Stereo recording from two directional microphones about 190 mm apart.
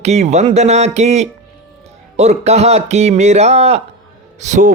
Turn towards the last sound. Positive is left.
turn(degrees=-40)  # may be behind; listen again after turning